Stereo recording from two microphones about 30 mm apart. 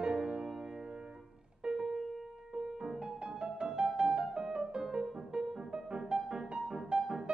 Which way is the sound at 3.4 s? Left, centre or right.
Right.